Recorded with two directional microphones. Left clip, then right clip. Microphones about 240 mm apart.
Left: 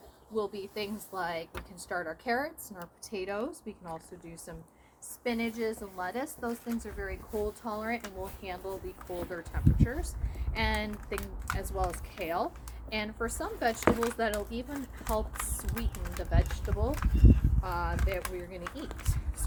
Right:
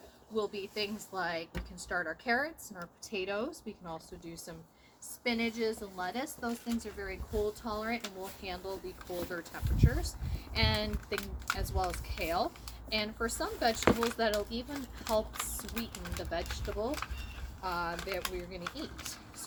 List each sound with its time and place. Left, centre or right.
0.3 s speech: centre
5.2 s speech: centre